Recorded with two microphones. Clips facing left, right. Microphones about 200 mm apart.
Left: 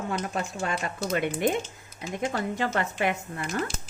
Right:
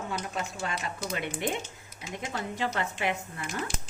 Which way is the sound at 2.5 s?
50° left (ahead or behind).